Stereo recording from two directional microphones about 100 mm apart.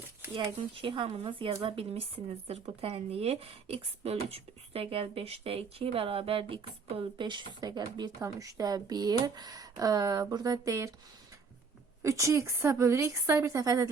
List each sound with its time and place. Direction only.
0.8 s speech: 50° right (ahead or behind)
1.2 s speech: 70° right (ahead or behind)
7.3 s speech: 50° right (ahead or behind)
12.0 s speech: 30° right (ahead or behind)